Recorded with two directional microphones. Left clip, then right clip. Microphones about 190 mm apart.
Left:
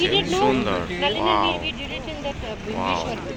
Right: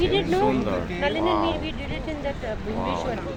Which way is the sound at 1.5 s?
20° right (ahead or behind).